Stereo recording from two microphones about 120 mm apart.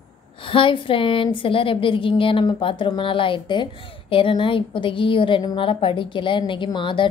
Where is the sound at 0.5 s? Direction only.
45° left (ahead or behind).